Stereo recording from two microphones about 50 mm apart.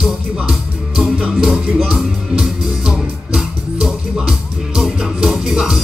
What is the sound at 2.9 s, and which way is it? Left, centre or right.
Music, centre.